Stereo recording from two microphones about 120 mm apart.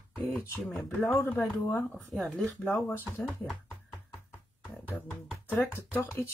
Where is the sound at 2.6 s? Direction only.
15° left (ahead or behind).